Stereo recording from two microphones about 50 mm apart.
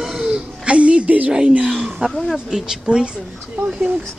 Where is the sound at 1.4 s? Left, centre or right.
Right.